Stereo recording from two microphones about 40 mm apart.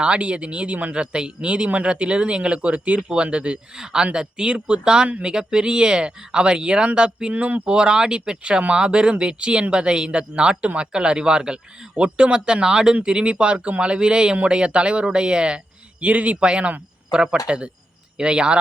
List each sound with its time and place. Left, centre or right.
0.0 s speech: right
0.9 s speech: right
7.3 s speech: right
7.7 s speech: right
17.1 s speech: centre